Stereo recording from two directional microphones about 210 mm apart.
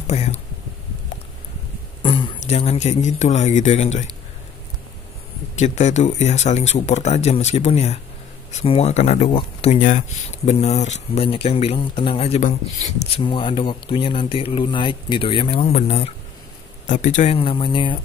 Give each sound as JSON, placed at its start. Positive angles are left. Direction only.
{"t": 0.0, "sound": "speech", "side_deg": 30}
{"t": 2.0, "sound": "speech", "side_deg": 25}
{"t": 5.6, "sound": "speech", "side_deg": 35}
{"t": 13.2, "sound": "a man's voice", "side_deg": 25}